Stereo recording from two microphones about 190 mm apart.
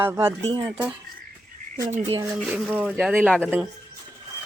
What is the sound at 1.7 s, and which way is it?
Speech, 40° right (ahead or behind).